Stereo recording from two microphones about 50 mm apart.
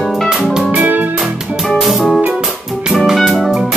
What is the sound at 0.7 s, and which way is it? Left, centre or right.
Music, right.